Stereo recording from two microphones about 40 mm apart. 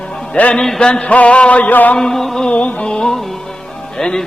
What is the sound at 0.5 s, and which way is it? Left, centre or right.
Music, centre.